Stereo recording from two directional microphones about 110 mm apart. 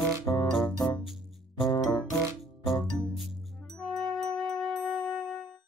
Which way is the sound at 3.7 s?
5° left (ahead or behind).